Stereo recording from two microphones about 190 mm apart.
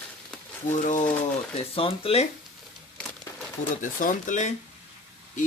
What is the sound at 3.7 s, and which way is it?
Speech, 45° left (ahead or behind).